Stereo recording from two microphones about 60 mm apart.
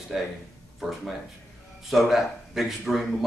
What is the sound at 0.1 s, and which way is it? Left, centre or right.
Speech, centre.